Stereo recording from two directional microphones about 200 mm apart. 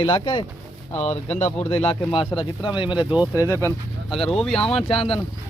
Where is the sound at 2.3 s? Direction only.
25° left (ahead or behind).